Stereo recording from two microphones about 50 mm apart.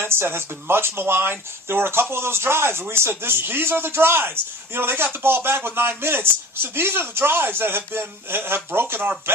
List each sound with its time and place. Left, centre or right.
0.0 s speech: right